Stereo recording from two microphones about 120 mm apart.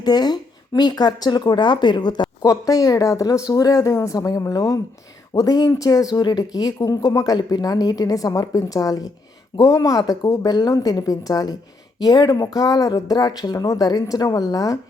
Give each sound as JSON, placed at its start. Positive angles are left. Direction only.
{"t": 0.0, "sound": "speech", "side_deg": 35}